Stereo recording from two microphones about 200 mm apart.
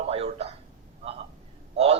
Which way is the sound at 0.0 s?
30° right (ahead or behind).